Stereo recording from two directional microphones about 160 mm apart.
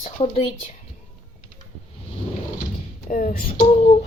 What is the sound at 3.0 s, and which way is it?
Speech, 55° left (ahead or behind).